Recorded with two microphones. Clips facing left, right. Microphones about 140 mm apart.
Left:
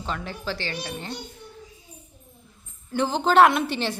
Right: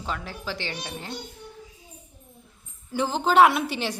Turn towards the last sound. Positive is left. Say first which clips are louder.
# left 1 dB
turn(degrees=-10)  # may be behind; listen again after turning